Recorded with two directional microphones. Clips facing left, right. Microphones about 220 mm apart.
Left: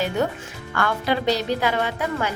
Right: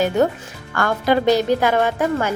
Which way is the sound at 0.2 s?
45° right (ahead or behind).